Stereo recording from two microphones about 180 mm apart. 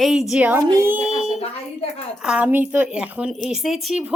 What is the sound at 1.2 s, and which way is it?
Speech, 35° left (ahead or behind).